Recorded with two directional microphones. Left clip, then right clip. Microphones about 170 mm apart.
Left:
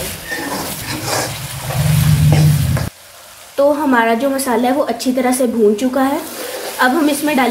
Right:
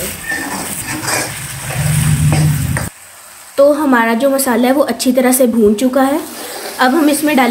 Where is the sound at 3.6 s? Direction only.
20° right (ahead or behind).